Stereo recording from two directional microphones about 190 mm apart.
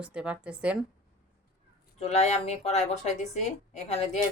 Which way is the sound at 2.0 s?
35° left (ahead or behind).